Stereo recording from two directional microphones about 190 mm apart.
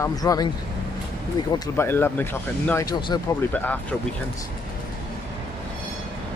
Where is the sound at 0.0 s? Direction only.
20° left (ahead or behind).